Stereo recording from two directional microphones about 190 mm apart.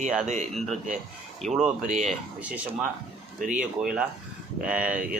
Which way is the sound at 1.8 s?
40° right (ahead or behind).